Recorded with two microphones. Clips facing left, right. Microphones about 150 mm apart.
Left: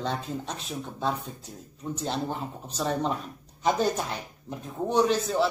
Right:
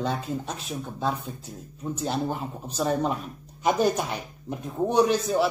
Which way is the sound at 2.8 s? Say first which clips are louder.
Right 3 dB; 10° right (ahead or behind).